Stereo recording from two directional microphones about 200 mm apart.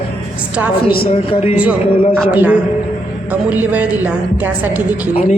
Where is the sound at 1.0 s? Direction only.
30° left (ahead or behind).